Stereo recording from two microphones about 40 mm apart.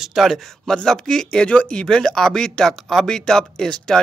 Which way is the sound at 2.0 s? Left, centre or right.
Centre.